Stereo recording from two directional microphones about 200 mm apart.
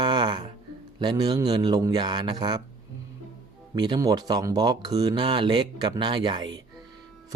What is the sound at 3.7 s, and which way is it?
Speech, 20° right (ahead or behind).